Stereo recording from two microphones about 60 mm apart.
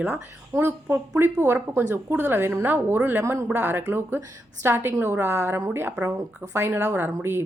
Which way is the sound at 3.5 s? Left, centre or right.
Right.